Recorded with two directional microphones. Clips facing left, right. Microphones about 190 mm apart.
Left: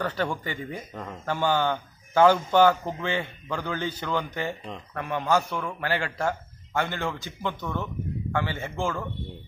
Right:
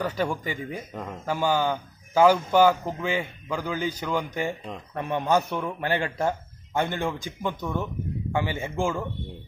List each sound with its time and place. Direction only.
0.0 s speech: 10° right (ahead or behind)